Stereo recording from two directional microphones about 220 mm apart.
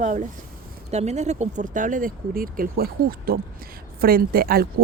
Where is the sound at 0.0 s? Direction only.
35° right (ahead or behind).